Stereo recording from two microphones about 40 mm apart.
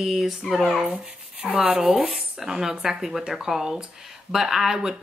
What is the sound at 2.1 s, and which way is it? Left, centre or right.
A woman's voice, centre.